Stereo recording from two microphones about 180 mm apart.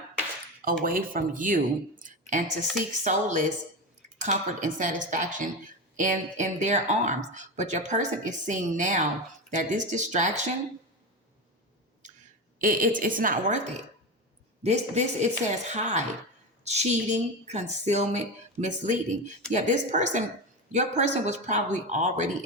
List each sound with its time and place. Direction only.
0.6 s speech: 50° right (ahead or behind)
12.5 s speech: 50° right (ahead or behind)
14.6 s a woman's voice: 40° right (ahead or behind)